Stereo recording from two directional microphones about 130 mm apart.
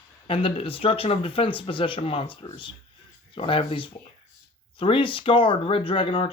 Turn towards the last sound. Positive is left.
turn(degrees=45)  # may be behind; listen again after turning